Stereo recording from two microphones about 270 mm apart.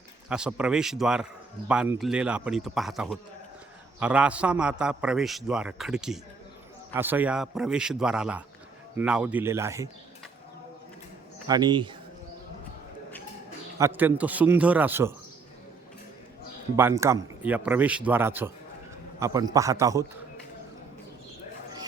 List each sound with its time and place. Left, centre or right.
0.3 s a man's voice: centre
11.4 s a man's voice: centre
13.7 s a man's voice: centre
16.7 s a man's voice: centre